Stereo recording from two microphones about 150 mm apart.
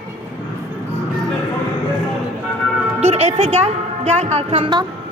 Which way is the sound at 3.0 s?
45° right (ahead or behind).